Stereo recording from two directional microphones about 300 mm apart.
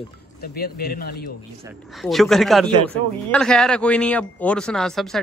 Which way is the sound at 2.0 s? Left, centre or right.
Centre.